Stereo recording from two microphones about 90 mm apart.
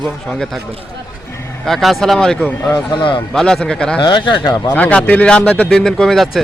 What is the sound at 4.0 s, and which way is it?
Speech, 60° left (ahead or behind).